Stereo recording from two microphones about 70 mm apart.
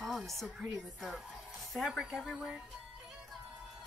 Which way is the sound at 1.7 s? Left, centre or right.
Centre.